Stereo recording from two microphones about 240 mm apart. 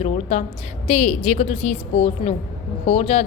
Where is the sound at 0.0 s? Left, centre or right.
Left.